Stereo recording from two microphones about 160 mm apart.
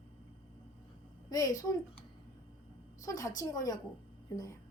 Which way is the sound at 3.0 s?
20° left (ahead or behind).